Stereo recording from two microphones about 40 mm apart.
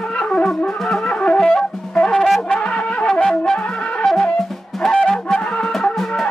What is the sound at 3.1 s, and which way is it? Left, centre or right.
Music, centre.